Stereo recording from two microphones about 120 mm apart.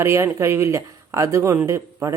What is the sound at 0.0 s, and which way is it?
Speech, 25° right (ahead or behind).